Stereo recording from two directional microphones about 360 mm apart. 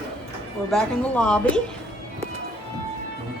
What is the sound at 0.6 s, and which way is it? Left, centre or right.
Speech, centre.